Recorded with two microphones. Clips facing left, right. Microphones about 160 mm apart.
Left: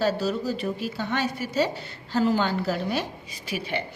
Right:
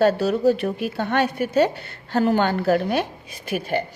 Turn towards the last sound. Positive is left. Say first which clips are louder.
# right 6 dB
turn(degrees=-45)  # may be behind; listen again after turning